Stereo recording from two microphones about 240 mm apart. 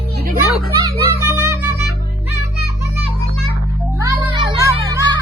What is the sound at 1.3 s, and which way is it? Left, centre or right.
Music, centre.